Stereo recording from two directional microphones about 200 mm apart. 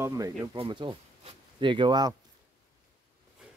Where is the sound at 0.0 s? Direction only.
15° right (ahead or behind).